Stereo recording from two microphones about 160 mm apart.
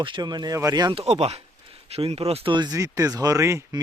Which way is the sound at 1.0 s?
40° right (ahead or behind).